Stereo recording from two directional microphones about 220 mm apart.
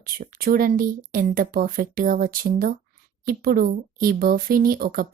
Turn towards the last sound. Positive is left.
turn(degrees=-40)  # may be behind; listen again after turning